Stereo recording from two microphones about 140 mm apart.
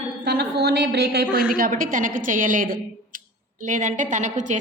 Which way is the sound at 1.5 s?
85° right.